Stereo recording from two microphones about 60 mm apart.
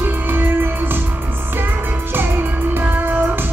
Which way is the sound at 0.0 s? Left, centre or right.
Right.